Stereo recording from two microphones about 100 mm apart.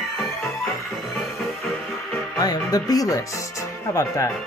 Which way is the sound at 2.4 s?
40° left (ahead or behind).